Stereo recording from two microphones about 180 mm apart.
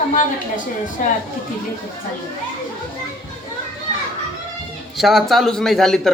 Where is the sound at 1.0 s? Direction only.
45° left (ahead or behind).